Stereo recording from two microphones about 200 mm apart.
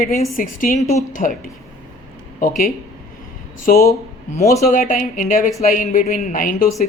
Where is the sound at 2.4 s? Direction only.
45° left (ahead or behind).